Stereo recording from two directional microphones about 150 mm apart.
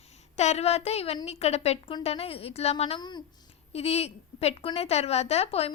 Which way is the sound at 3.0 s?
30° left (ahead or behind).